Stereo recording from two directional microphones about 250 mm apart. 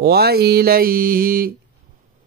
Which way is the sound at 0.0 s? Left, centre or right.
Right.